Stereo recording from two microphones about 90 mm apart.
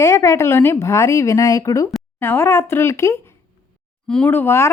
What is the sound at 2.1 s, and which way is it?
A woman's voice, 25° left (ahead or behind).